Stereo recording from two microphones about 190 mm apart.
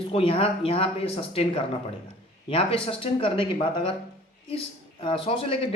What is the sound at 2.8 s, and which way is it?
Speech, 30° left (ahead or behind).